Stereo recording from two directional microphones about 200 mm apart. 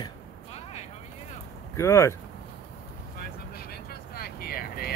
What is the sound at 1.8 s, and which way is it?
Speech, 15° left (ahead or behind).